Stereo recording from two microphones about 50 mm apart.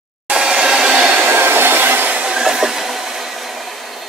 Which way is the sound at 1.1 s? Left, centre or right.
Right.